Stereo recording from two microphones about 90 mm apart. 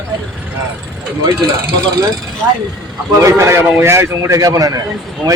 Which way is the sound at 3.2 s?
30° right (ahead or behind).